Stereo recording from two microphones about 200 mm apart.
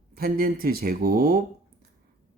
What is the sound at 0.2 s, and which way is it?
Speech, 45° right (ahead or behind).